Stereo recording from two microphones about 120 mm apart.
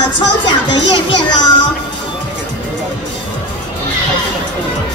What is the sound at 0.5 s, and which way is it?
A man's voice, 40° left (ahead or behind).